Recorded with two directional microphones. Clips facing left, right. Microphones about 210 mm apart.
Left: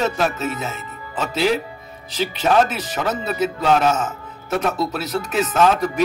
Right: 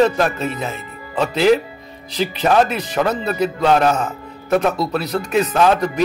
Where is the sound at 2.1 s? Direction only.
Centre (ahead or behind).